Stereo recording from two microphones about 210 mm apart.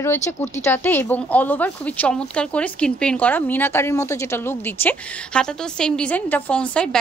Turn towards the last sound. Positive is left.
turn(degrees=5)  # may be behind; listen again after turning